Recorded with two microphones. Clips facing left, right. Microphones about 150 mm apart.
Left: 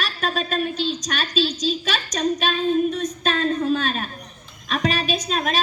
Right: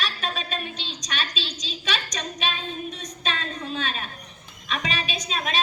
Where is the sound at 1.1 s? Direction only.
Centre (ahead or behind).